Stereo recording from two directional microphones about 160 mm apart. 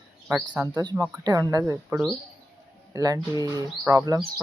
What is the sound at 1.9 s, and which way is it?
Speech, centre (ahead or behind).